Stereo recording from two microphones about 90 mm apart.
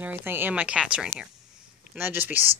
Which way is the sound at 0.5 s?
15° right (ahead or behind).